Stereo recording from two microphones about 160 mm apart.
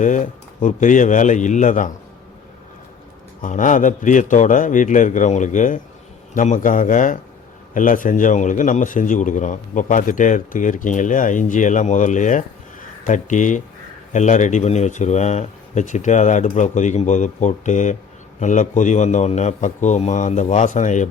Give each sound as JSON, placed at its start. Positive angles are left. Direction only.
{"t": 0.0, "sound": "a man's voice", "side_deg": 50}
{"t": 3.4, "sound": "a man's voice", "side_deg": 50}